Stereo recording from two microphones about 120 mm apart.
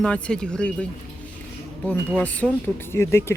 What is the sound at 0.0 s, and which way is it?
Speech, 5° left (ahead or behind).